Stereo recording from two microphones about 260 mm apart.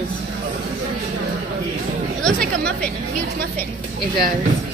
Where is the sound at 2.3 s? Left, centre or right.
Right.